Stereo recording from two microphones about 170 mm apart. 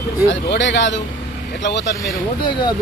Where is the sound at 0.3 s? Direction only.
90° left.